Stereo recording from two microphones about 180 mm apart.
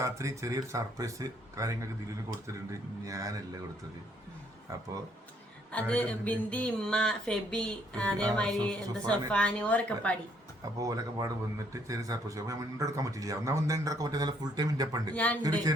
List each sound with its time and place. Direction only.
0.0 s a man's voice: 15° right (ahead or behind)
4.7 s speech: 15° right (ahead or behind)
5.9 s speech: 5° left (ahead or behind)
10.8 s a man's voice: 20° right (ahead or behind)
15.1 s speech: 5° left (ahead or behind)
15.4 s a man's voice: 20° right (ahead or behind)